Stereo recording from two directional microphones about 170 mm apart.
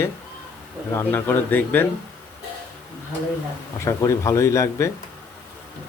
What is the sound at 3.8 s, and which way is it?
Speech, 15° left (ahead or behind).